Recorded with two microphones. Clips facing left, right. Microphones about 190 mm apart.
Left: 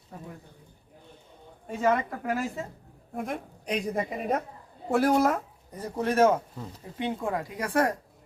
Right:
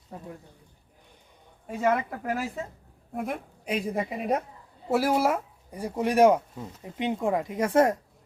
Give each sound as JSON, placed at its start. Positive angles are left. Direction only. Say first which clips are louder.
{"t": 1.8, "sound": "a woman's voice", "louder": "even", "side_deg": -5}